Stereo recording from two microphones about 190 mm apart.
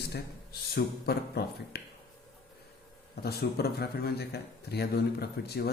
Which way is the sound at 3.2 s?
55° left (ahead or behind).